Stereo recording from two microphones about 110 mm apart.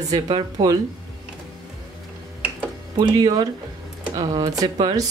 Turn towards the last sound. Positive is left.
turn(degrees=-35)  # may be behind; listen again after turning